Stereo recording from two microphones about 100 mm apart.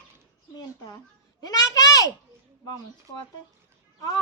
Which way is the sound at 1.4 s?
40° left (ahead or behind).